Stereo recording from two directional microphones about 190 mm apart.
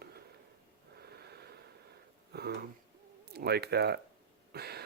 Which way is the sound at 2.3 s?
55° right (ahead or behind).